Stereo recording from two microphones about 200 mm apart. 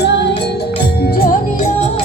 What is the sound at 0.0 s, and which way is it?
Music, 60° left (ahead or behind).